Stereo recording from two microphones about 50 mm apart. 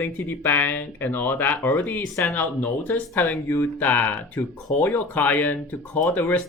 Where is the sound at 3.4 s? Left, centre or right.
Left.